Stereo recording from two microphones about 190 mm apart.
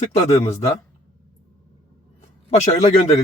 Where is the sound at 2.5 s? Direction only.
35° left (ahead or behind).